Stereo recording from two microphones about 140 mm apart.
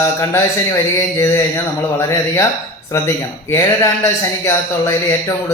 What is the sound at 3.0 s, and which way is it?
Speech, 20° left (ahead or behind).